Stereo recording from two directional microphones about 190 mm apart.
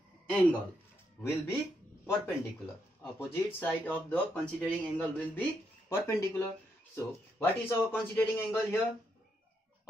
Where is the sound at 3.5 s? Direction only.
5° left (ahead or behind).